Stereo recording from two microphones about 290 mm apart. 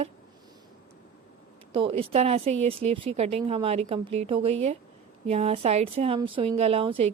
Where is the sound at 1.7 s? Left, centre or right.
Centre.